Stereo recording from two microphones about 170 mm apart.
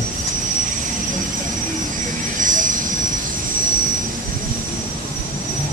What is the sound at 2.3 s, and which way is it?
Vehicle, 50° right (ahead or behind).